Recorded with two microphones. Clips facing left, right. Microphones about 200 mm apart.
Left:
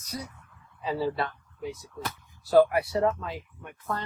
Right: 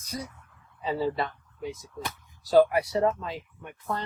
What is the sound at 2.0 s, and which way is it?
Speech, 20° right (ahead or behind).